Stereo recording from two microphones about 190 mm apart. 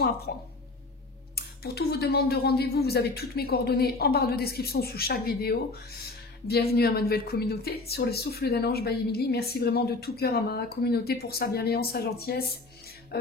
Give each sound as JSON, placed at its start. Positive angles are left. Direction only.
{"t": 0.3, "sound": "a woman's voice", "side_deg": 55}